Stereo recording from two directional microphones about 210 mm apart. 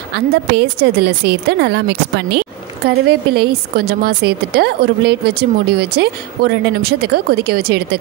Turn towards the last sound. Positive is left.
turn(degrees=-50)  # may be behind; listen again after turning